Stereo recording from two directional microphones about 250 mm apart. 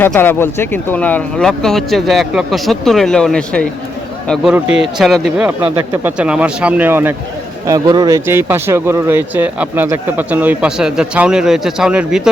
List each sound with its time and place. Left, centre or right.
0.0 s speech: centre